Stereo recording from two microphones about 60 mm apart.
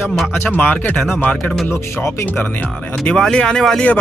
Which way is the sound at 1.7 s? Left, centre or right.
Left.